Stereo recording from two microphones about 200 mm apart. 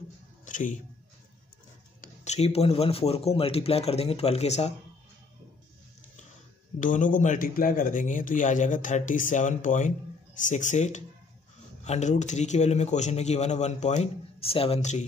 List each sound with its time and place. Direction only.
0.5 s speech: 40° left (ahead or behind)
2.0 s speech: 35° left (ahead or behind)
6.8 s speech: 40° left (ahead or behind)